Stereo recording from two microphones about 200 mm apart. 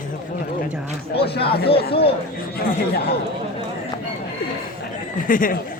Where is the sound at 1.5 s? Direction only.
50° left (ahead or behind).